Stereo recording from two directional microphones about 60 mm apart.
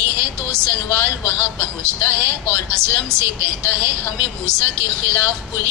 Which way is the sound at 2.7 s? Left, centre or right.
Right.